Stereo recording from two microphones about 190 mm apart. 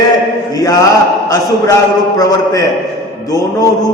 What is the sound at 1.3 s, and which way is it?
A man's voice, 20° left (ahead or behind).